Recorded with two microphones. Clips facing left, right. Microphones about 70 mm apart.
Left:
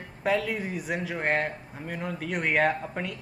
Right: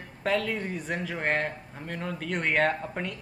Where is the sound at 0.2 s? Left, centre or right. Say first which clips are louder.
Left 1 dB; centre.